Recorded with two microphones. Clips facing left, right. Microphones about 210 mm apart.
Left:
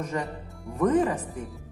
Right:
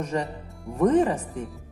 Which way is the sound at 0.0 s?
30° right (ahead or behind).